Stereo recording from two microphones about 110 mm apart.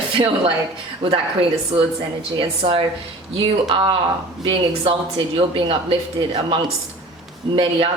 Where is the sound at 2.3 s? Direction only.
55° right (ahead or behind).